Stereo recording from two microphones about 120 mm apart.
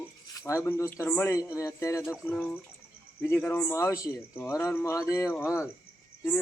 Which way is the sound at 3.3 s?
20° left (ahead or behind).